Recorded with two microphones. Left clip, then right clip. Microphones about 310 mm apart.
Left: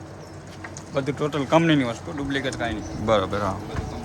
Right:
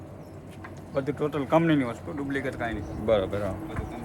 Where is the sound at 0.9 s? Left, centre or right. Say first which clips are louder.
Left 3 dB; left.